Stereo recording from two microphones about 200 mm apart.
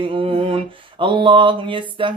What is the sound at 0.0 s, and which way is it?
Mantra, 25° right (ahead or behind).